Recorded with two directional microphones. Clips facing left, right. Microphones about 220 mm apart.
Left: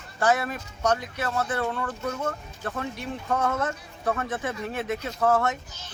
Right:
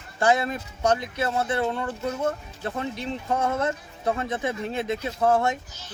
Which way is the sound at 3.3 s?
25° right (ahead or behind).